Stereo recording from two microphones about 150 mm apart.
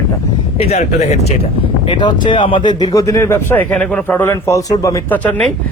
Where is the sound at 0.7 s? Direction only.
50° left (ahead or behind).